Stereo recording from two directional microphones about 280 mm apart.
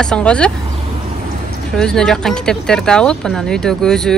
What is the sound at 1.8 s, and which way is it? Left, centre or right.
Speech, centre.